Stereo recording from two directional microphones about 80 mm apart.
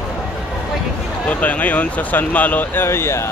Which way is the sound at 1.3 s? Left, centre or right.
Centre.